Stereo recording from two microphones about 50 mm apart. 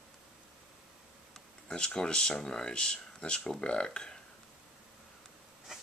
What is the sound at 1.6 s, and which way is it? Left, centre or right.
Speech, centre.